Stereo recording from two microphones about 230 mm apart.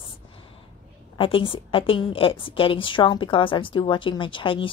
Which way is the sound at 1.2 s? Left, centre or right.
Left.